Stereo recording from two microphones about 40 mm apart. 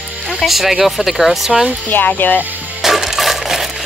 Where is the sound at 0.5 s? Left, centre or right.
Centre.